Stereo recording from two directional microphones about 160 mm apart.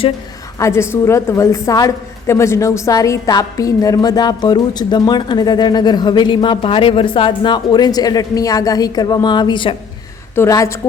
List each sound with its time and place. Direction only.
0.6 s a woman's voice: 15° left (ahead or behind)
10.3 s a woman's voice: 15° left (ahead or behind)